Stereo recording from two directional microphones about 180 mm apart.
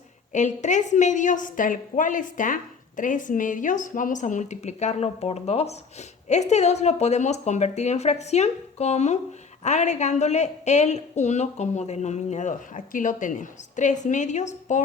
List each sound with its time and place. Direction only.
0.3 s a woman's voice: 40° left (ahead or behind)